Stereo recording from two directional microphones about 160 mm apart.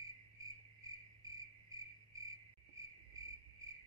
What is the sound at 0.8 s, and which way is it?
Cricket, 25° right (ahead or behind).